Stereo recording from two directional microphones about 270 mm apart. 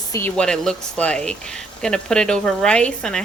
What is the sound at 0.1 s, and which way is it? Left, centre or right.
Speech, centre.